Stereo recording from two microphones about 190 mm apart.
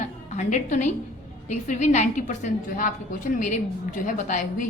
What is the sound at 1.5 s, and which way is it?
A woman's voice, 40° left (ahead or behind).